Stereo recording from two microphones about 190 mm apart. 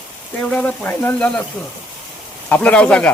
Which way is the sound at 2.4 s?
5° left (ahead or behind).